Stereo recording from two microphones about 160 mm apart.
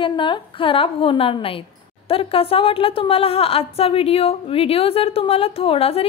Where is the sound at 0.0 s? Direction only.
30° left (ahead or behind).